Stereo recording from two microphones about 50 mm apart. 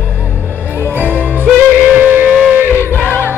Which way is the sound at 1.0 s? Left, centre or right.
Right.